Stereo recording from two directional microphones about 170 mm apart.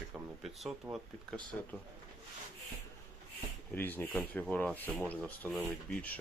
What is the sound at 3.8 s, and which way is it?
Speech, 10° left (ahead or behind).